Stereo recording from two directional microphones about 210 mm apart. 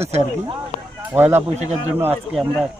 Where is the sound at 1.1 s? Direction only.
10° right (ahead or behind).